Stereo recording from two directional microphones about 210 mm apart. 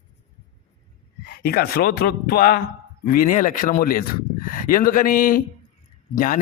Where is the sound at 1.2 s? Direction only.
45° left (ahead or behind).